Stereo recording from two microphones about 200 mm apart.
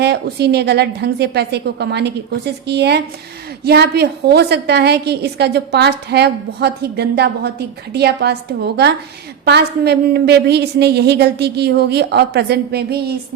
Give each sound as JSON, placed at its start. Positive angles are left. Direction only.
{"t": 0.0, "sound": "a woman's voice", "side_deg": -55}